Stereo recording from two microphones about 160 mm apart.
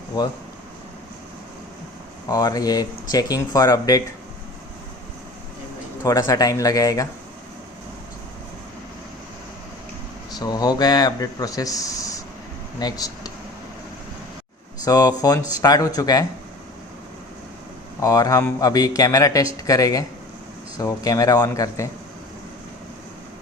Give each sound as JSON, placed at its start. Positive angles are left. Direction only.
{"t": 2.3, "sound": "speech", "side_deg": 25}
{"t": 6.0, "sound": "speech", "side_deg": 20}
{"t": 10.3, "sound": "speech", "side_deg": 25}
{"t": 14.8, "sound": "speech", "side_deg": 25}
{"t": 18.0, "sound": "speech", "side_deg": 20}